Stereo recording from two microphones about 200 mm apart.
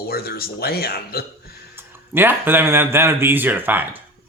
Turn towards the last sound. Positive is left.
turn(degrees=-10)  # may be behind; listen again after turning